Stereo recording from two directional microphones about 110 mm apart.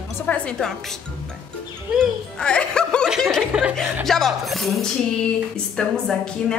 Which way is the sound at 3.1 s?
5° left (ahead or behind).